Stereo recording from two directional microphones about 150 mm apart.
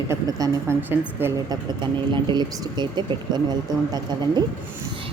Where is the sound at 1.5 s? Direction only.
30° right (ahead or behind).